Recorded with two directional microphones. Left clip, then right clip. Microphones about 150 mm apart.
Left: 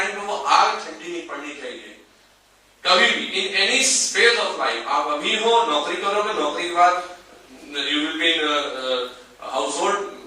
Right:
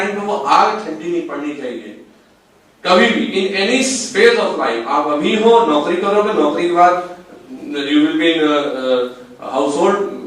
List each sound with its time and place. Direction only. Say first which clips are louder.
0.3 s a man's voice: right 5 dB; 10° right (ahead or behind)
9.9 s speech: right 7 dB; 25° right (ahead or behind)